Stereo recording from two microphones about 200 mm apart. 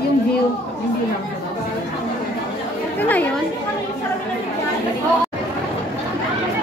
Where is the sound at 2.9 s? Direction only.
10° left (ahead or behind).